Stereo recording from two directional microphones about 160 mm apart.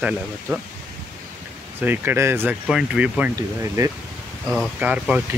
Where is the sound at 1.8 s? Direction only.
10° right (ahead or behind).